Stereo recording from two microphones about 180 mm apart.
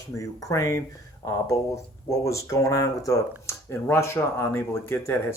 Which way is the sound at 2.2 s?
15° left (ahead or behind).